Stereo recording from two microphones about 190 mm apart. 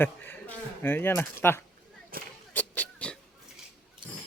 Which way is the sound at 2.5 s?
10° left (ahead or behind).